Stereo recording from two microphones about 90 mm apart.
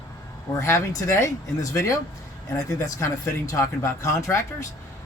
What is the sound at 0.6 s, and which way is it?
Speech, 30° left (ahead or behind).